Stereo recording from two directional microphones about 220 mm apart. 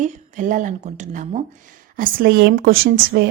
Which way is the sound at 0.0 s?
35° right (ahead or behind).